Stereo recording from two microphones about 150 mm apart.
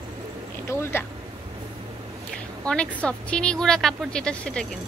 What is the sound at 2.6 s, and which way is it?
A woman's voice, 5° left (ahead or behind).